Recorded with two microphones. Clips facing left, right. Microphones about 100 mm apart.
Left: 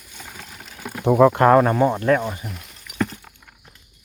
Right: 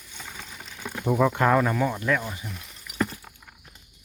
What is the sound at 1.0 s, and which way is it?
Speech, 65° left (ahead or behind).